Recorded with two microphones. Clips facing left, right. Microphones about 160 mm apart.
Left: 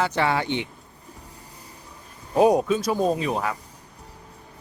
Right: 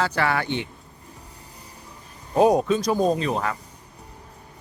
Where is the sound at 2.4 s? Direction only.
5° left (ahead or behind).